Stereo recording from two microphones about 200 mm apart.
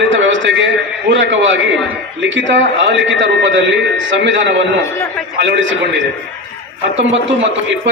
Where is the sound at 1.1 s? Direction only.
65° right (ahead or behind).